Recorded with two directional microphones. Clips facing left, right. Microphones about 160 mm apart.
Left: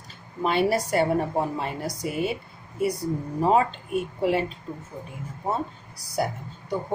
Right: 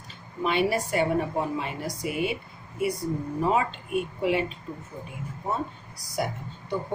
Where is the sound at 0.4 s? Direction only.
40° left (ahead or behind).